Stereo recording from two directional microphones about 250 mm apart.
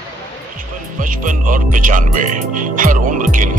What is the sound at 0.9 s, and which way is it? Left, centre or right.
Speech, right.